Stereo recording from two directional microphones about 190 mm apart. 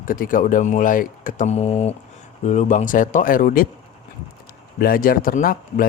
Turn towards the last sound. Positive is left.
turn(degrees=50)  # may be behind; listen again after turning